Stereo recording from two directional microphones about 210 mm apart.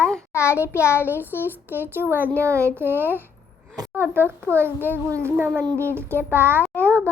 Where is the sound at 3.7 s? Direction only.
20° right (ahead or behind).